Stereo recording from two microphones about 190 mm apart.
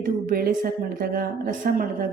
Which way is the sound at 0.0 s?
50° right (ahead or behind).